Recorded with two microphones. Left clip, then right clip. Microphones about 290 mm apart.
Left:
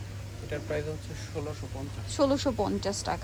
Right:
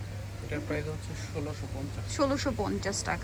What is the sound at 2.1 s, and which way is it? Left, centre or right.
Speech, centre.